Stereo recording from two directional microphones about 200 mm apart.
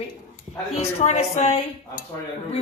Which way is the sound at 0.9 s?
35° left (ahead or behind).